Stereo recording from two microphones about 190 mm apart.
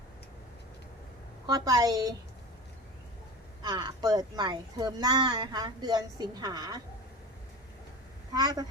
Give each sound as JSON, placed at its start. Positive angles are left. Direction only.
{"t": 1.5, "sound": "a child's voice", "side_deg": -20}
{"t": 3.6, "sound": "a child's voice", "side_deg": -20}
{"t": 8.3, "sound": "a child's voice", "side_deg": -20}